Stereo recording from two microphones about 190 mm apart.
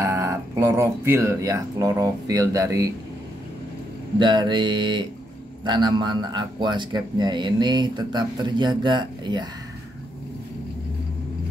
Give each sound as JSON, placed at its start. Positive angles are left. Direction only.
{"t": 0.0, "sound": "speech", "side_deg": -15}
{"t": 4.2, "sound": "a man's voice", "side_deg": -25}